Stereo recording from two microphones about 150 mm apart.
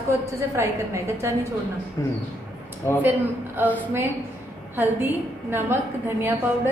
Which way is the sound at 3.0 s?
15° right (ahead or behind).